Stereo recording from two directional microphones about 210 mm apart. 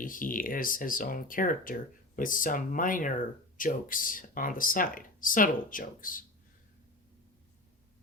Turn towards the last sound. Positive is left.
turn(degrees=40)  # may be behind; listen again after turning